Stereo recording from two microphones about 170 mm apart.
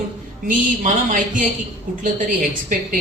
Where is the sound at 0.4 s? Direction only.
50° right (ahead or behind).